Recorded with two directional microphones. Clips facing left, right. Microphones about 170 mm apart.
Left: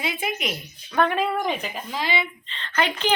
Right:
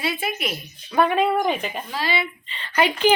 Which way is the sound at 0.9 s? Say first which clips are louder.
Right 3 dB; 5° right (ahead or behind).